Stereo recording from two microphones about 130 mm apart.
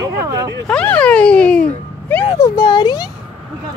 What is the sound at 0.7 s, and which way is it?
Speech, 10° left (ahead or behind).